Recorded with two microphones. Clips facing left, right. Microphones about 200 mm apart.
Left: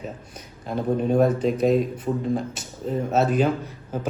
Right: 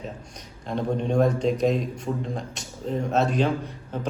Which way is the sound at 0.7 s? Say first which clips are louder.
Left 3 dB; 5° left (ahead or behind).